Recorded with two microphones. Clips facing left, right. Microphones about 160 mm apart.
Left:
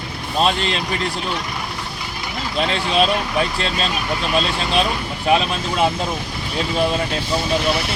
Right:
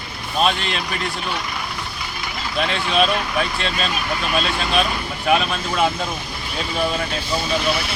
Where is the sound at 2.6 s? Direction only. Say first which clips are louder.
Left 1 dB; 35° left (ahead or behind).